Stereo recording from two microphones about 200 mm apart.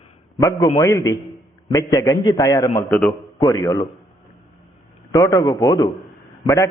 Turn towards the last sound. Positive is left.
turn(degrees=15)  # may be behind; listen again after turning